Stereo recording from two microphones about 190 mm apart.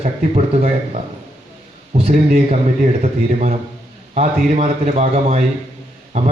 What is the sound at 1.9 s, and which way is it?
A man's voice, 35° right (ahead or behind).